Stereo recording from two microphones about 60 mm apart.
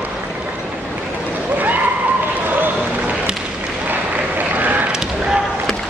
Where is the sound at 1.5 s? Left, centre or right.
Right.